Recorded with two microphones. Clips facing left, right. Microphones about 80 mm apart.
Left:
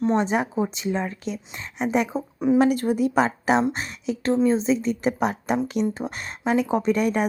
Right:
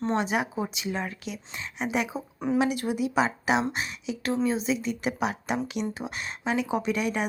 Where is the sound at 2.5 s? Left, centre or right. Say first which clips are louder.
Left 5 dB; left.